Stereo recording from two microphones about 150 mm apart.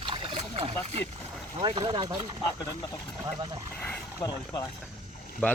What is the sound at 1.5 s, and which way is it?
Speech, 35° right (ahead or behind).